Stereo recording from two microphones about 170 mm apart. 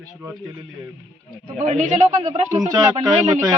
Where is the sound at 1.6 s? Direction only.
45° right (ahead or behind).